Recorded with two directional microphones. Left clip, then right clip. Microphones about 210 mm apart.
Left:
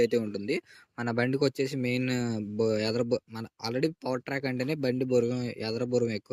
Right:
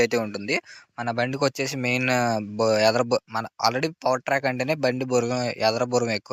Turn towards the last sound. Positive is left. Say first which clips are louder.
# right 5 dB
turn(degrees=5)  # may be behind; listen again after turning